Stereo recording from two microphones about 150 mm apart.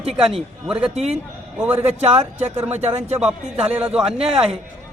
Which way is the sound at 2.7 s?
45° right (ahead or behind).